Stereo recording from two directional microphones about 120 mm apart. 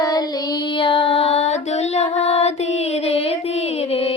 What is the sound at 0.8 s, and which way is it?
Child singing, 45° left (ahead or behind).